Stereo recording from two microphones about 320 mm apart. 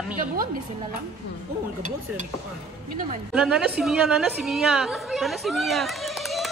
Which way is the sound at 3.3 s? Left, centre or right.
Centre.